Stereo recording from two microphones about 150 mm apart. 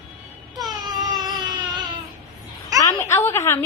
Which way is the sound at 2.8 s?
20° left (ahead or behind).